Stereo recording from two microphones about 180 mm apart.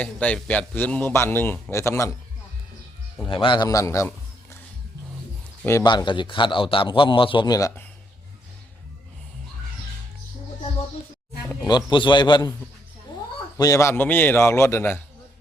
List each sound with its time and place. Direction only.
0.0 s a man's voice: 5° left (ahead or behind)
3.2 s a man's voice: 30° left (ahead or behind)
5.6 s a man's voice: 20° left (ahead or behind)
11.6 s a man's voice: 25° left (ahead or behind)
13.6 s a man's voice: 15° left (ahead or behind)